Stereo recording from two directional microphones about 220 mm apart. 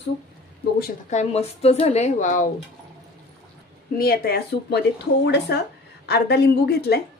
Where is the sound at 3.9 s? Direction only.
45° left (ahead or behind).